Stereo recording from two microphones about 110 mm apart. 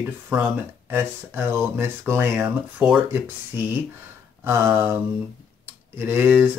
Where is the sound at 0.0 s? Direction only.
20° right (ahead or behind).